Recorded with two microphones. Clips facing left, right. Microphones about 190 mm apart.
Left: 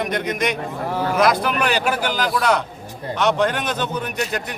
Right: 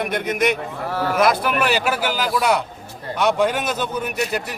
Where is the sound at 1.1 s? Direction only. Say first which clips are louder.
Even; 5° right (ahead or behind).